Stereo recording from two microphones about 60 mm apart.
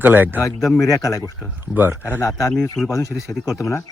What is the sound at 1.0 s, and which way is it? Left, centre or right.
Speech, left.